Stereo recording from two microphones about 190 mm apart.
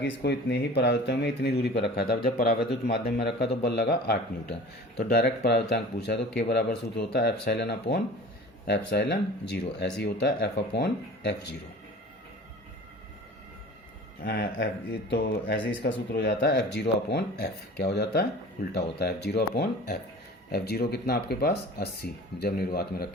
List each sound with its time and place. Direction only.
0.0 s speech: 65° left (ahead or behind)
14.2 s speech: 55° left (ahead or behind)